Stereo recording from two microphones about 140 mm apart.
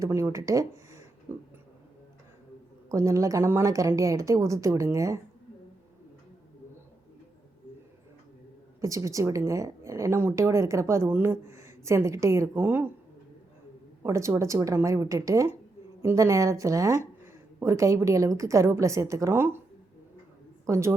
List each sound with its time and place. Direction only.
0.0 s speech: 20° right (ahead or behind)
2.9 s speech: 20° right (ahead or behind)
8.8 s speech: 25° right (ahead or behind)
14.0 s speech: 20° right (ahead or behind)
20.7 s speech: 20° right (ahead or behind)